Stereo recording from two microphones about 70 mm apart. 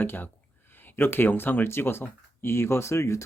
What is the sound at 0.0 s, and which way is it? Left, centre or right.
Speech, left.